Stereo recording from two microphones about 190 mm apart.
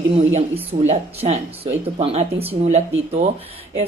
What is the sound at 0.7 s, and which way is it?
A woman's voice, 35° right (ahead or behind).